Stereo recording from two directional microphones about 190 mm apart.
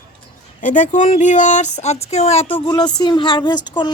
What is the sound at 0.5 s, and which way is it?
Speech, 40° left (ahead or behind).